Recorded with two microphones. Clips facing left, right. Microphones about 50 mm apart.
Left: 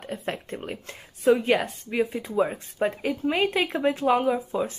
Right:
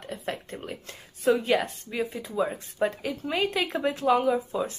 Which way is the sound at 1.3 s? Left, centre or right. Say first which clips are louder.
Left 2 dB; left.